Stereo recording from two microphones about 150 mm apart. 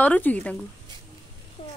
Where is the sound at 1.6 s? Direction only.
35° left (ahead or behind).